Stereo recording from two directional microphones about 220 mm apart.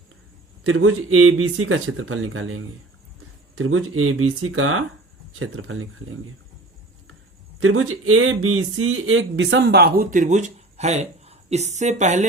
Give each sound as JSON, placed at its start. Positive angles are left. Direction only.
{"t": 0.6, "sound": "speech", "side_deg": -70}
{"t": 7.6, "sound": "speech", "side_deg": -70}